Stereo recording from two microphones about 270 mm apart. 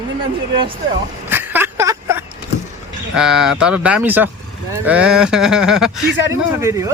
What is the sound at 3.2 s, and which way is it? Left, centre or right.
Speech, centre.